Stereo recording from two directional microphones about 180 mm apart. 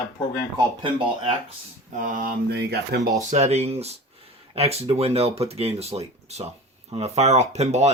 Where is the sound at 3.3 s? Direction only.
40° right (ahead or behind).